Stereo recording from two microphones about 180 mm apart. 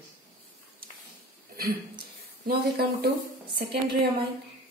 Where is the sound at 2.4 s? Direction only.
60° right (ahead or behind).